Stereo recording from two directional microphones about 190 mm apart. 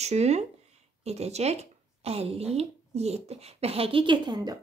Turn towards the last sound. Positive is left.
turn(degrees=-20)  # may be behind; listen again after turning